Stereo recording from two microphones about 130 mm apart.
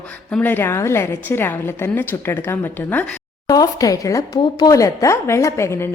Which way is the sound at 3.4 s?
30° left (ahead or behind).